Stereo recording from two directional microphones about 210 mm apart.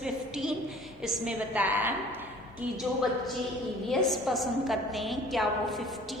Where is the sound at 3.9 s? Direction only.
Centre (ahead or behind).